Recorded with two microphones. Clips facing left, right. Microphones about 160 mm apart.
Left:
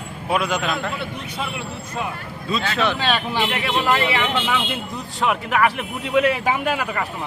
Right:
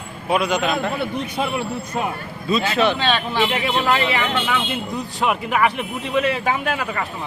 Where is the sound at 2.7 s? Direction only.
Centre (ahead or behind).